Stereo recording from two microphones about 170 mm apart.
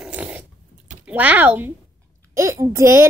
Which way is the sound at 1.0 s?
10° right (ahead or behind).